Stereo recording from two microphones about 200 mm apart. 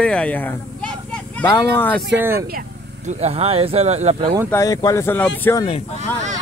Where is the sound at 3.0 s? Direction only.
30° right (ahead or behind).